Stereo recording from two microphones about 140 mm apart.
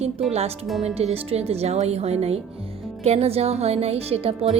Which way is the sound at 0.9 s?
45° right (ahead or behind).